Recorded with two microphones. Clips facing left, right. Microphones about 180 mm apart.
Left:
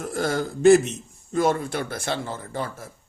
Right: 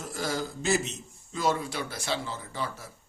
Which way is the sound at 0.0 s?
55° left (ahead or behind).